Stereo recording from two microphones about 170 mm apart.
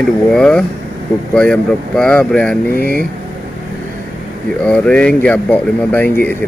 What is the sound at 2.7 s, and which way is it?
Speech, 60° left (ahead or behind).